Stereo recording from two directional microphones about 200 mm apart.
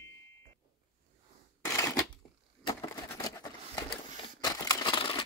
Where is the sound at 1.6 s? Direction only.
15° left (ahead or behind).